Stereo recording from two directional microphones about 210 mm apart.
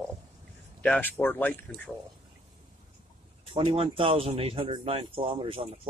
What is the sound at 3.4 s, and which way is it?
Speech, 25° right (ahead or behind).